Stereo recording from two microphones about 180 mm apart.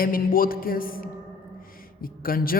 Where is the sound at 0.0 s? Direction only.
50° left (ahead or behind).